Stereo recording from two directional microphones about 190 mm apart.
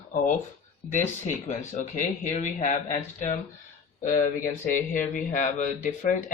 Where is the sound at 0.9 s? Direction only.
40° left (ahead or behind).